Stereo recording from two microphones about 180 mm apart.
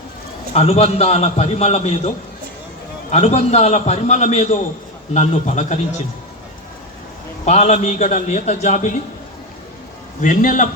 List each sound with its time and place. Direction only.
0.5 s a man's voice: 35° left (ahead or behind)
7.4 s a man's voice: 35° left (ahead or behind)
10.2 s a man's voice: 45° left (ahead or behind)